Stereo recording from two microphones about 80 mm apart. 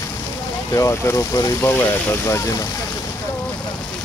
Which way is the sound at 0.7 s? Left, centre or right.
Left.